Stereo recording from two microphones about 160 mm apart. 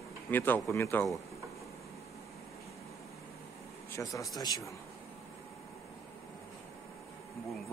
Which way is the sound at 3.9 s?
20° left (ahead or behind).